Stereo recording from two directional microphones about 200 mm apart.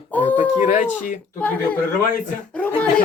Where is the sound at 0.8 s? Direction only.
40° left (ahead or behind).